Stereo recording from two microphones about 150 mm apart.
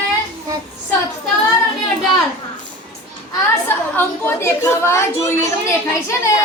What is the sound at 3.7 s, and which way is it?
A woman's voice, 15° left (ahead or behind).